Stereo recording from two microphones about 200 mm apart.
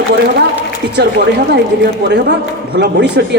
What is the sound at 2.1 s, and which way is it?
Speech, 55° right (ahead or behind).